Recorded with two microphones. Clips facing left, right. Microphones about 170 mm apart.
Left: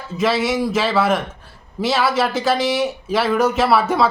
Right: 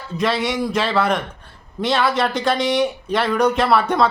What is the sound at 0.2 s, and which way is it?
Speech, centre (ahead or behind).